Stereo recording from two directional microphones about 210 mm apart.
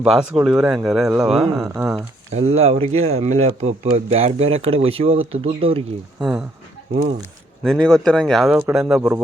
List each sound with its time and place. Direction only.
0.0 s speech: 5° right (ahead or behind)
2.0 s speech: 30° right (ahead or behind)
6.1 s speech: 5° right (ahead or behind)
6.9 s speech: 30° right (ahead or behind)
7.6 s speech: centre (ahead or behind)